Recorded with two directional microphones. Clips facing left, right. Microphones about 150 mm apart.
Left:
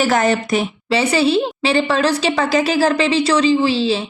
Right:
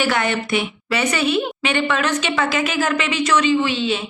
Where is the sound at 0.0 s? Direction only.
40° left (ahead or behind).